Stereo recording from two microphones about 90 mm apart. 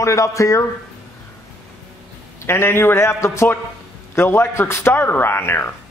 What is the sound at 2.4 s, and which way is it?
A man's voice, 30° left (ahead or behind).